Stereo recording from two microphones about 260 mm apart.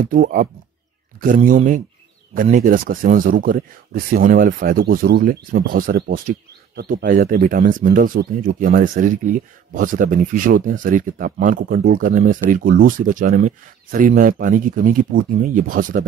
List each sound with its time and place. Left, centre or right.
0.0 s speech: right